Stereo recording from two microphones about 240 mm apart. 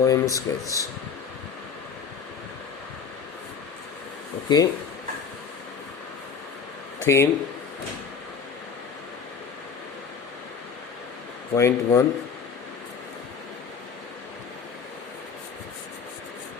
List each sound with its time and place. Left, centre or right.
0.0 s speech: centre
4.4 s speech: centre
7.0 s speech: centre
11.5 s speech: centre